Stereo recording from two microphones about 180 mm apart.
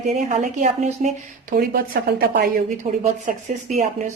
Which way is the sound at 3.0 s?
40° right (ahead or behind).